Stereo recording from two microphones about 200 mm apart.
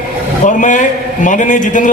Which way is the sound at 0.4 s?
40° left (ahead or behind).